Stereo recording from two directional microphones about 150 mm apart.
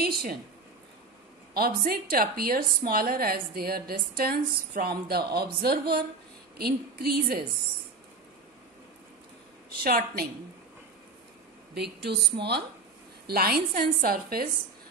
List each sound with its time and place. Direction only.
0.0 s a woman's voice: 90° right
1.5 s a woman's voice: 85° right
9.8 s a woman's voice: 80° right
11.7 s a woman's voice: 90° right